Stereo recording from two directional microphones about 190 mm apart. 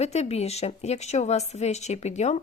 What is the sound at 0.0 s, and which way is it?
Speech, 35° left (ahead or behind).